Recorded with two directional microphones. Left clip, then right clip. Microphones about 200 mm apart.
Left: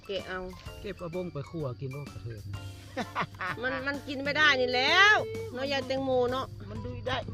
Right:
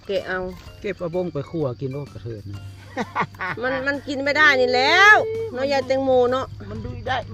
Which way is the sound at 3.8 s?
10° left (ahead or behind).